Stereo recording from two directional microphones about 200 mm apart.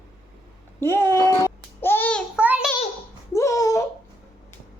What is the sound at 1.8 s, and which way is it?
Babbling, 10° left (ahead or behind).